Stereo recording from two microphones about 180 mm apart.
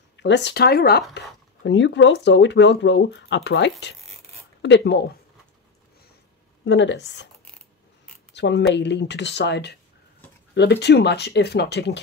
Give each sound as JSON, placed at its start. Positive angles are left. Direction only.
{"t": 0.2, "sound": "speech", "side_deg": 75}
{"t": 1.1, "sound": "speech", "side_deg": 75}
{"t": 6.6, "sound": "speech", "side_deg": 80}
{"t": 8.3, "sound": "speech", "side_deg": 75}